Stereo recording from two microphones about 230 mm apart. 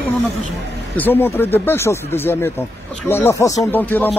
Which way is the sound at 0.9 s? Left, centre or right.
Centre.